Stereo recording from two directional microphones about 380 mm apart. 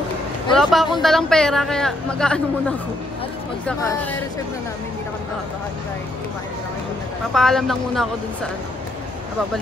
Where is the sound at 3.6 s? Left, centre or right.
Centre.